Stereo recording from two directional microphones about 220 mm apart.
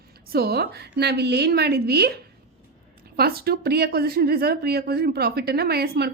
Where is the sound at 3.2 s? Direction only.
45° right (ahead or behind).